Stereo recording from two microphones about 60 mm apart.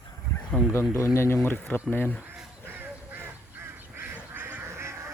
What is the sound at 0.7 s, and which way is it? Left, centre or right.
Speech, left.